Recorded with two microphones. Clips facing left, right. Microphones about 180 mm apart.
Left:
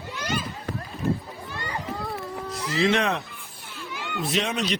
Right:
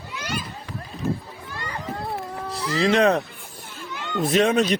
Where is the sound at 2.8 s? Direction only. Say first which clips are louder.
Right 5 dB; 35° right (ahead or behind).